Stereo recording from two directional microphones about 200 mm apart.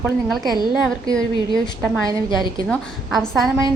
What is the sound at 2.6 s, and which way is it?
Speech, centre (ahead or behind).